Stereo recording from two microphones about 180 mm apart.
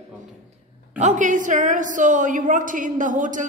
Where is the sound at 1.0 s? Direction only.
40° right (ahead or behind).